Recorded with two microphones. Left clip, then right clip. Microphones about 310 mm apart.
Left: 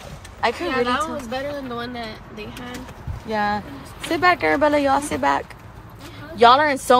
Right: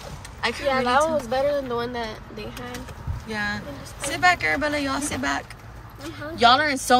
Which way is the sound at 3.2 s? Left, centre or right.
Centre.